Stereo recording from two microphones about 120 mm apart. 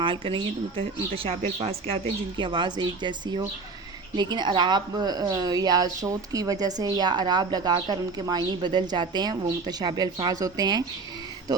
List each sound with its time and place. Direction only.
0.0 s speech: 45° right (ahead or behind)
2.4 s a woman's voice: 40° right (ahead or behind)